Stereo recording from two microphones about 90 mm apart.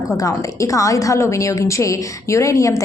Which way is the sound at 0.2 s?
40° left (ahead or behind).